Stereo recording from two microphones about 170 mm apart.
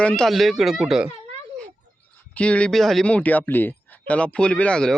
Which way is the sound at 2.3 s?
5° left (ahead or behind).